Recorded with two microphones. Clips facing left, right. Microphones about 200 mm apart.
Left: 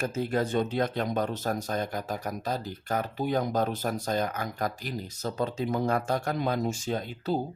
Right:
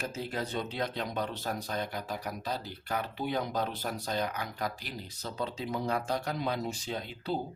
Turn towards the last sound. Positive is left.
turn(degrees=45)  # may be behind; listen again after turning